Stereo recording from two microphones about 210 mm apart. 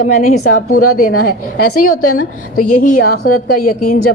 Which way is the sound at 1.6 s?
90° left.